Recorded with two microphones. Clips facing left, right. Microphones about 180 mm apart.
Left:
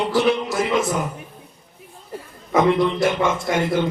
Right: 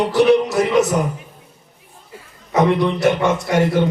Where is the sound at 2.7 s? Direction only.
60° right (ahead or behind).